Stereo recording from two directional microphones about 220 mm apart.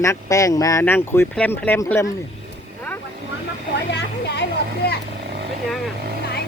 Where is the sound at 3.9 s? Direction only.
50° left (ahead or behind).